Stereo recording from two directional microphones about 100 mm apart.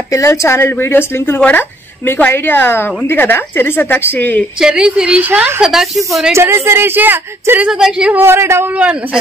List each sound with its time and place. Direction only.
0.1 s a woman's voice: 30° left (ahead or behind)
4.6 s a woman's voice: 10° right (ahead or behind)
8.2 s a woman's voice: 25° right (ahead or behind)